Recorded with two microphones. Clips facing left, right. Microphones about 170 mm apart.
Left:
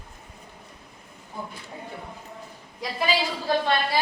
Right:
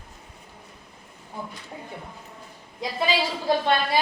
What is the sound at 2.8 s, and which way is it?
A woman's voice, 20° right (ahead or behind).